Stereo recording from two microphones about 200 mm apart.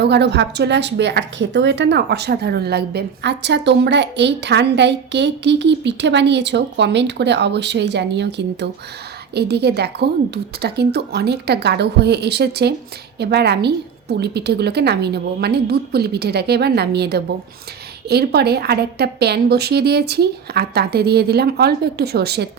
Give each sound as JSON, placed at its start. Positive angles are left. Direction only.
{"t": 0.0, "sound": "a woman's voice", "side_deg": -55}